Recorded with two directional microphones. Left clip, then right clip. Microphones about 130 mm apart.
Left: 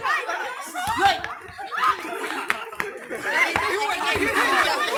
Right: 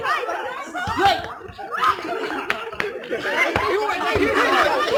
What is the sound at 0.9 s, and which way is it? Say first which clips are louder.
Laughter: right 1 dB; 40° left (ahead or behind).